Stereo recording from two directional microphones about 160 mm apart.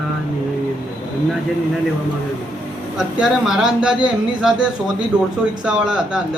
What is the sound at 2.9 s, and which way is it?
A man's voice, 5° right (ahead or behind).